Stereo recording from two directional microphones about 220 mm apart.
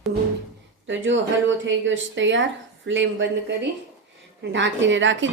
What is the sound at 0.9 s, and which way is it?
A woman's voice, 55° right (ahead or behind).